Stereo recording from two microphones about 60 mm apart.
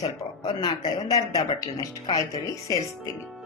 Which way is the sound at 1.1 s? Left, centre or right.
Left.